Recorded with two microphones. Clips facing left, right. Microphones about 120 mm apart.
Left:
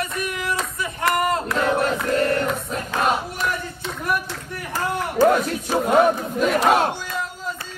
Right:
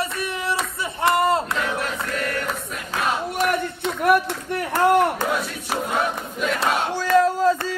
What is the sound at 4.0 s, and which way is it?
Run, 65° right (ahead or behind).